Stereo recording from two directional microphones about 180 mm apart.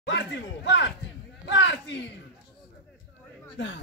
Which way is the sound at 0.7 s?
80° left.